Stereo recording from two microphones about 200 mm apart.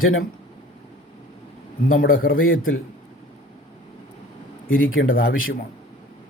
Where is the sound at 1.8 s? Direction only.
45° left (ahead or behind).